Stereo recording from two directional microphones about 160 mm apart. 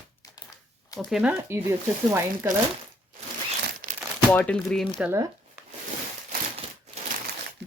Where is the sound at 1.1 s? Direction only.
5° right (ahead or behind).